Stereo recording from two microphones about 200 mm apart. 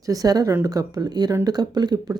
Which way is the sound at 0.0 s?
15° right (ahead or behind).